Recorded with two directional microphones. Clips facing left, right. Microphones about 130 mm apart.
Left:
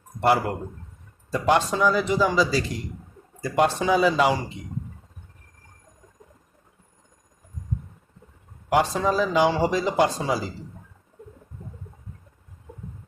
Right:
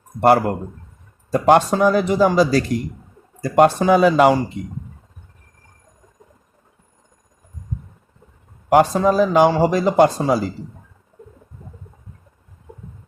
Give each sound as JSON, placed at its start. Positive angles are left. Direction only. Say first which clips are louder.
{"t": 0.2, "sound": "speech", "louder": "right 6 dB", "side_deg": -55}
{"t": 8.7, "sound": "speech", "louder": "right 7 dB", "side_deg": -50}